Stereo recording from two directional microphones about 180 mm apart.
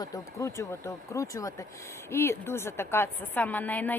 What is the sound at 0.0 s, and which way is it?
A woman's voice, 20° left (ahead or behind).